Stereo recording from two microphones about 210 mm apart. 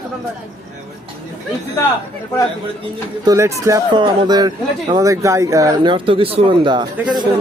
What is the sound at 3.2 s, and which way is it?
Speech, 15° right (ahead or behind).